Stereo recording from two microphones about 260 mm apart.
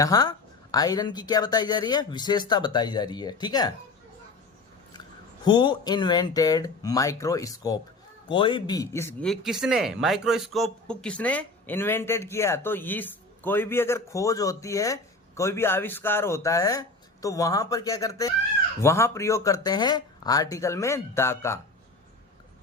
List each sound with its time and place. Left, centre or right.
0.0 s speech: centre
5.5 s speech: centre